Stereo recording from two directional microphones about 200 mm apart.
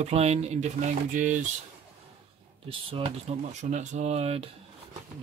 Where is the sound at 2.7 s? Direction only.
25° right (ahead or behind).